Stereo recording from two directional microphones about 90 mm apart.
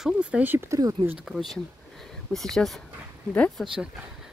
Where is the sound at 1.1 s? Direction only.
5° right (ahead or behind).